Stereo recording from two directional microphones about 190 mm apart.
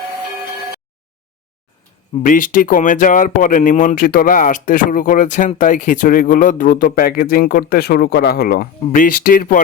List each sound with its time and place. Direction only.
2.2 s speech: 45° left (ahead or behind)